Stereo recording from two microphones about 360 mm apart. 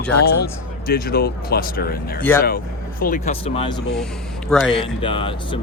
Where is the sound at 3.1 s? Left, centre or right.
Centre.